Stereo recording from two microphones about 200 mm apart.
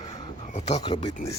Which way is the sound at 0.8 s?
25° left (ahead or behind).